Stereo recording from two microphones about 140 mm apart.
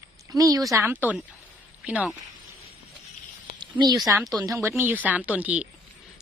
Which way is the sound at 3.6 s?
30° right (ahead or behind).